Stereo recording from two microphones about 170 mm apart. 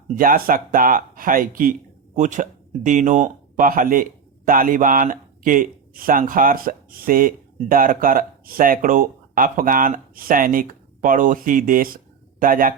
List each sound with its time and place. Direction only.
0.2 s speech: 55° right (ahead or behind)